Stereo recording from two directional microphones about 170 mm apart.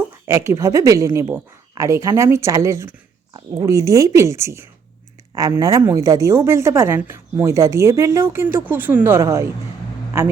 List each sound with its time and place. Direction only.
0.3 s a woman's voice: 15° right (ahead or behind)